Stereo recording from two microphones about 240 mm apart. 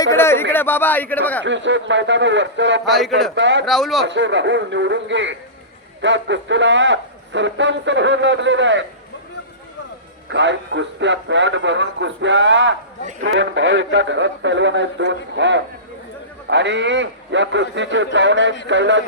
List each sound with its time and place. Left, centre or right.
0.0 s speech: centre
1.5 s a man's voice: right
3.7 s speech: centre
4.0 s a man's voice: right
10.2 s a man's voice: right